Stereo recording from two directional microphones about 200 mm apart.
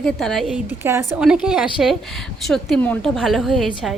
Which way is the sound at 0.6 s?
10° right (ahead or behind).